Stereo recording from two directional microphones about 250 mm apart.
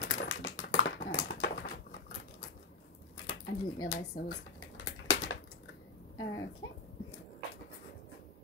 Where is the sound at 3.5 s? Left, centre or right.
Left.